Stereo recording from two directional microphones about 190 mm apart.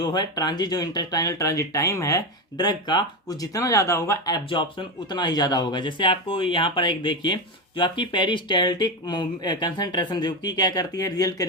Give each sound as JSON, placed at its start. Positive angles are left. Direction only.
{"t": 0.0, "sound": "speech", "side_deg": 20}
{"t": 4.4, "sound": "speech", "side_deg": 25}